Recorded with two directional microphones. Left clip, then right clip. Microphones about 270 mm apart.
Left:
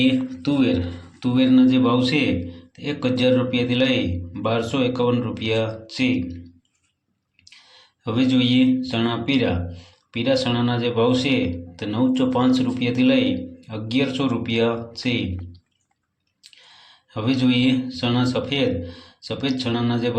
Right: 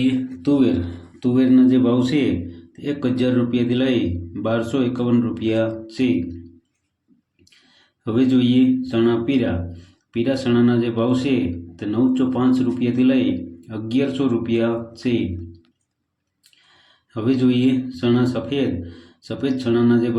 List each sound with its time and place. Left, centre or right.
0.0 s a man's voice: centre
8.0 s a man's voice: centre
17.2 s a man's voice: centre